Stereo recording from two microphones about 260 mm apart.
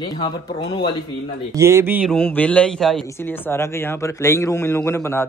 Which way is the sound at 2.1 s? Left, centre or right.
Centre.